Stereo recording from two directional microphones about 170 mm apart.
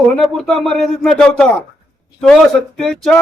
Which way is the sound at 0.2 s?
Centre (ahead or behind).